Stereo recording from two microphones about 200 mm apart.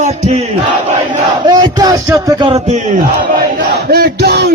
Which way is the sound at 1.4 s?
20° right (ahead or behind).